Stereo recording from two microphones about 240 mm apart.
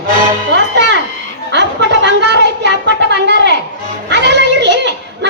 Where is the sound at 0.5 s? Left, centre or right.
Right.